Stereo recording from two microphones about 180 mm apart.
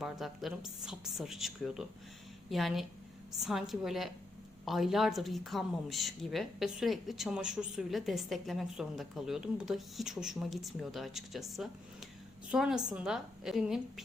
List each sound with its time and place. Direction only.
0.0 s a woman's voice: centre (ahead or behind)